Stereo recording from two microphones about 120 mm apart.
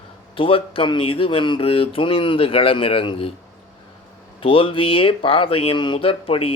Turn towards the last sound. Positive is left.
turn(degrees=50)  # may be behind; listen again after turning